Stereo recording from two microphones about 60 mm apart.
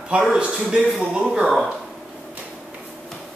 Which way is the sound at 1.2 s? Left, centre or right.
Centre.